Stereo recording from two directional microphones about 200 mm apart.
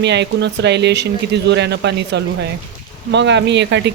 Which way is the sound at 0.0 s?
60° right (ahead or behind).